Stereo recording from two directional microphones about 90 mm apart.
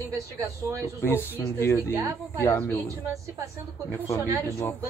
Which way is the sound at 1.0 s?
25° left (ahead or behind).